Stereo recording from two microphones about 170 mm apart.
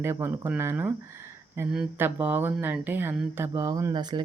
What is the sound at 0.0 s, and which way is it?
Speech, 15° right (ahead or behind).